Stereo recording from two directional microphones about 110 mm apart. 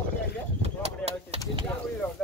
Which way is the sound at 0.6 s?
70° right (ahead or behind).